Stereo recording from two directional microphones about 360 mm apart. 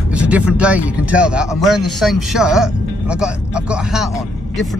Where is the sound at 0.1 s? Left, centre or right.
Centre.